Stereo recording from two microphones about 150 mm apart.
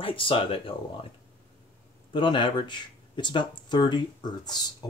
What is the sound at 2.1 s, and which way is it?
Speech, 30° left (ahead or behind).